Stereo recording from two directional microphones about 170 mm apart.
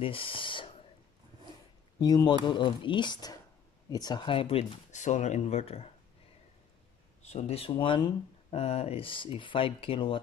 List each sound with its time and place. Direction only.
0.0 s speech: 30° left (ahead or behind)
2.0 s speech: 25° left (ahead or behind)
7.2 s speech: 40° left (ahead or behind)